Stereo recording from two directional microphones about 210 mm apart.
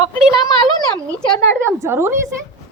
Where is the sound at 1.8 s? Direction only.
10° right (ahead or behind).